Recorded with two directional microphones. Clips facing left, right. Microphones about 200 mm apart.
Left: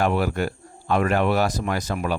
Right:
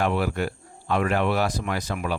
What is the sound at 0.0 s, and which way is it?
Speech, 45° left (ahead or behind).